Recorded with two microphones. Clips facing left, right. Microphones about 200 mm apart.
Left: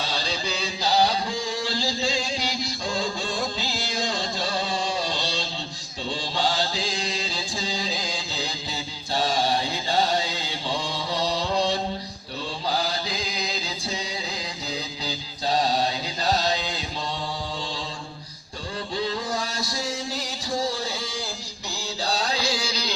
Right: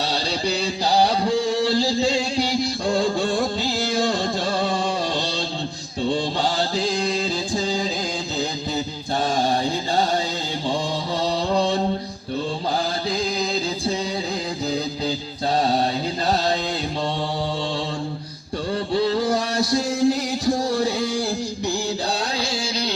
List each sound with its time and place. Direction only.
0.0 s music: 65° right (ahead or behind)
2.8 s music: 55° right (ahead or behind)
6.7 s music: 55° right (ahead or behind)
9.1 s mantra: 45° right (ahead or behind)
13.1 s music: 45° right (ahead or behind)
19.2 s a sound: 65° right (ahead or behind)
22.0 s music: 55° right (ahead or behind)